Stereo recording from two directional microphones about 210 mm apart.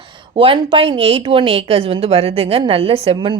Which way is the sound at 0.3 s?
25° right (ahead or behind).